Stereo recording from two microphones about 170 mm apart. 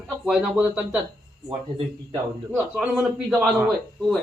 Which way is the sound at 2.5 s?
5° right (ahead or behind).